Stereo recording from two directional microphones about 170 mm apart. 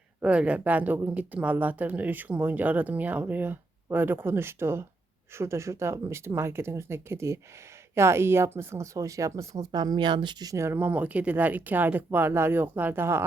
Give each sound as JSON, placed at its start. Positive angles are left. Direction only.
{"t": 0.2, "sound": "speech", "side_deg": -5}